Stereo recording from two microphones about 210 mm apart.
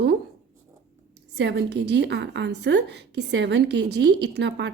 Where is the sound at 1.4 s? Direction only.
55° right (ahead or behind).